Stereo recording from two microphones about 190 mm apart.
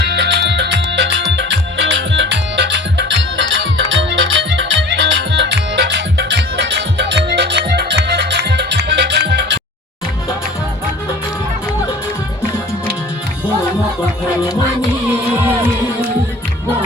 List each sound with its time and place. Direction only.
0.0 s music: 65° right (ahead or behind)